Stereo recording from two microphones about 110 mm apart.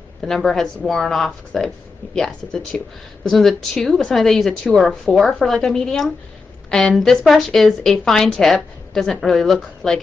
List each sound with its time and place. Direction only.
0.2 s a woman's voice: centre (ahead or behind)